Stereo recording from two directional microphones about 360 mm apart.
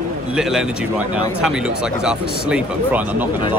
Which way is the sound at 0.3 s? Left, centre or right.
Centre.